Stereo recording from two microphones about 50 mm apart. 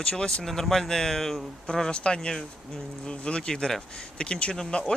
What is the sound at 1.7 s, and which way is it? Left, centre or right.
Speech, centre.